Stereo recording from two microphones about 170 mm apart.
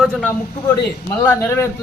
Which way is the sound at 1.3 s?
15° left (ahead or behind).